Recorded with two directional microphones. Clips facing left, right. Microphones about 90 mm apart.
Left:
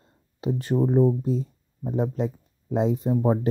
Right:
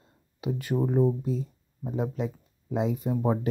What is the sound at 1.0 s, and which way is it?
Speech, 40° left (ahead or behind).